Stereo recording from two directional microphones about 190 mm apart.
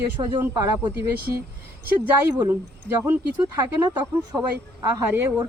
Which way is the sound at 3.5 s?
15° right (ahead or behind).